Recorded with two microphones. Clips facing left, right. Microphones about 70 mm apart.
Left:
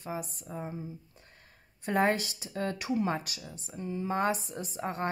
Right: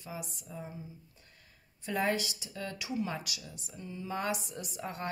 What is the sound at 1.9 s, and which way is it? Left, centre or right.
Speech, left.